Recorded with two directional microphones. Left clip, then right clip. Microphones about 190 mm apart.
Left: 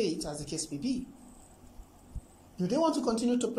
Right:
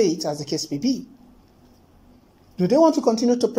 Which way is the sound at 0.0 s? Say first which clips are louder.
Right 11 dB; 30° right (ahead or behind).